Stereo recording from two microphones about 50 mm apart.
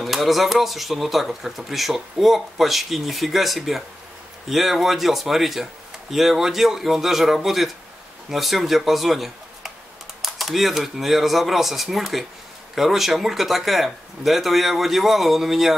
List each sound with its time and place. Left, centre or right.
0.0 s speech: centre